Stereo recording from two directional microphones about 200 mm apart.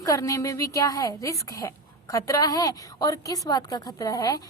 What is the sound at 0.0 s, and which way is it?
A woman's voice, 15° left (ahead or behind).